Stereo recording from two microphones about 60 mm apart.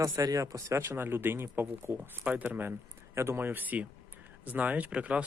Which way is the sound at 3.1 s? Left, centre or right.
Right.